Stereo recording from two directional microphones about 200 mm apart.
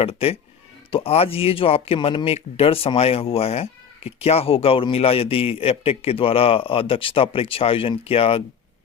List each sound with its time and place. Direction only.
0.0 s speech: 30° left (ahead or behind)